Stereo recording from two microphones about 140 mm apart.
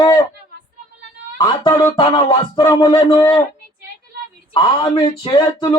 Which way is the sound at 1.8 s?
30° left (ahead or behind).